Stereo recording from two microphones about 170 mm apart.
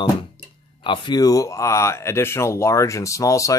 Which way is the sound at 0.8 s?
25° left (ahead or behind).